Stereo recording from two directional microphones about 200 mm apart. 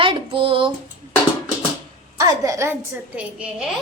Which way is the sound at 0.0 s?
25° right (ahead or behind).